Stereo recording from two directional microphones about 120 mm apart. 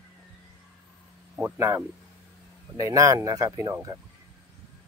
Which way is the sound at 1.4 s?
20° right (ahead or behind).